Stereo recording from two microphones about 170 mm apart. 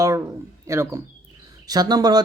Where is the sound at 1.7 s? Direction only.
25° right (ahead or behind).